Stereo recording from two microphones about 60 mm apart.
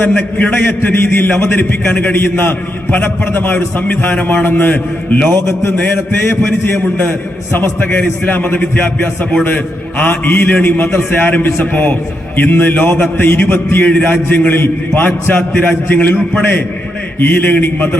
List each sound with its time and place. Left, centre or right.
0.0 s music: left
0.9 s a man's voice: left
3.8 s music: left
4.4 s a man's voice: left
7.0 s a man's voice: left
10.0 s a man's voice: left
17.2 s a man's voice: left